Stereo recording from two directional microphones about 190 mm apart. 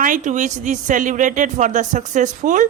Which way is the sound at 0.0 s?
40° right (ahead or behind).